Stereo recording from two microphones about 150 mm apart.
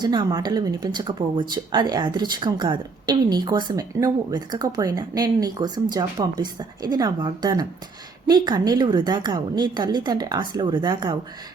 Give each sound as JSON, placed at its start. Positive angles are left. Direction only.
{"t": 0.0, "sound": "speech", "side_deg": -30}